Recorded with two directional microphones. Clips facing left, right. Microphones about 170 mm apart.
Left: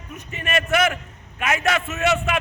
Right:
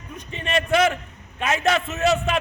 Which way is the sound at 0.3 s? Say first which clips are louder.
Right 1 dB; 30° right (ahead or behind).